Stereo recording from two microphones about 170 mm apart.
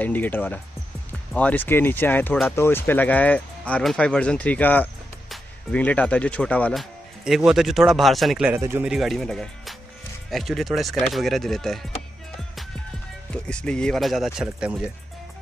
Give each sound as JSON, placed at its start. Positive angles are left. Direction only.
{"t": 0.0, "sound": "speech", "side_deg": 10}
{"t": 8.5, "sound": "speech", "side_deg": -15}
{"t": 8.8, "sound": "speech", "side_deg": 0}
{"t": 13.5, "sound": "speech", "side_deg": 5}